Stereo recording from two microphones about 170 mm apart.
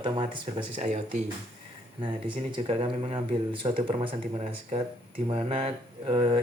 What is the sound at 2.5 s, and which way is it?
Speech, 30° right (ahead or behind).